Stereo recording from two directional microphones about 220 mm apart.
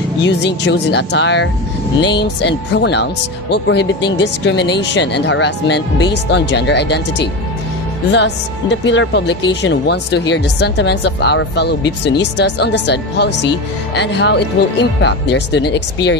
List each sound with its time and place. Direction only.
0.2 s speech: 50° left (ahead or behind)